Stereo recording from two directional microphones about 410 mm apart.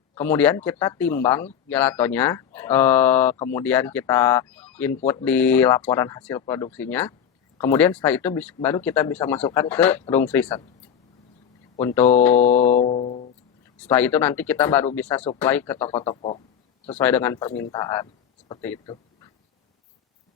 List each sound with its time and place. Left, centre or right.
0.1 s speech: centre
11.8 s speech: centre
12.4 s music: centre
13.7 s speech: centre
16.9 s speech: centre